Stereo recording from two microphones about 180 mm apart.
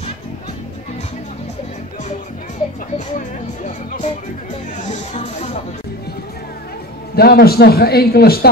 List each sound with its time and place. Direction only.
3.2 s speech: 45° left (ahead or behind)
7.2 s a man's voice: 60° left (ahead or behind)